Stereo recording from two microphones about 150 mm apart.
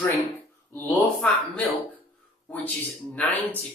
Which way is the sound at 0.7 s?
10° left (ahead or behind).